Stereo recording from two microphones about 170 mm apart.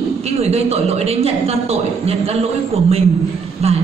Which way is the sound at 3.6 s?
35° right (ahead or behind).